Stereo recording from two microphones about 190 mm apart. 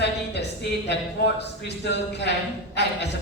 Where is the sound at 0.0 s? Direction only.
65° left (ahead or behind).